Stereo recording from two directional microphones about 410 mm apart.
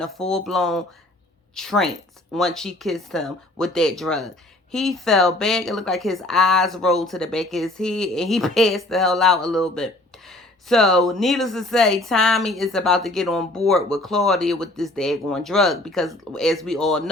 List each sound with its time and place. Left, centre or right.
0.0 s speech: centre